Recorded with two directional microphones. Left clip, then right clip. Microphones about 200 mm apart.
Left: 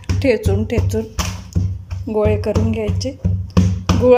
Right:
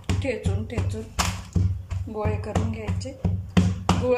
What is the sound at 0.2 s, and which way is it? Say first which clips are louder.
Speech: left 15 dB; 45° left (ahead or behind).